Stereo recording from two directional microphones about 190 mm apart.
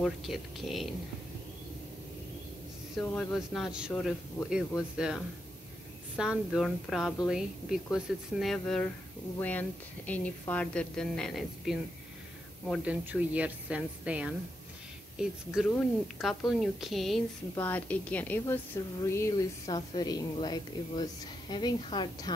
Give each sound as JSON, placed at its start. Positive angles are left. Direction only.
{"t": 0.0, "sound": "speech", "side_deg": 0}
{"t": 3.0, "sound": "a woman's voice", "side_deg": 5}
{"t": 4.5, "sound": "a woman's voice", "side_deg": -5}
{"t": 12.8, "sound": "a woman's voice", "side_deg": -10}
{"t": 15.7, "sound": "a woman's voice", "side_deg": 0}